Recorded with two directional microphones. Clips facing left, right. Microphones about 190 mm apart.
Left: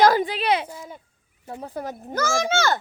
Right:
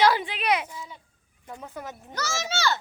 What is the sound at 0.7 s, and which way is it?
Speech, 50° left (ahead or behind).